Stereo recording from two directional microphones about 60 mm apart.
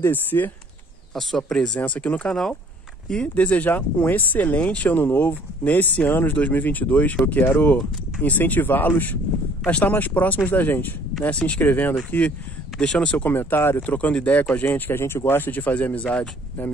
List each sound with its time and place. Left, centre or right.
0.0 s speech: left
1.1 s speech: centre
1.8 s speech: left
3.3 s speech: left
11.2 s speech: left
12.7 s speech: centre
13.3 s speech: left
13.8 s speech: left